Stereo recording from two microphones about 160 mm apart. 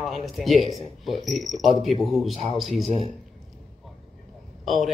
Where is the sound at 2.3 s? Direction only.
35° right (ahead or behind).